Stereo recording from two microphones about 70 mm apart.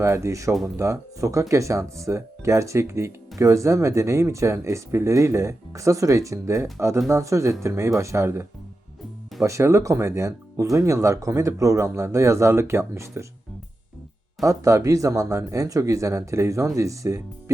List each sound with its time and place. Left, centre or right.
0.0 s speech: right
14.4 s speech: right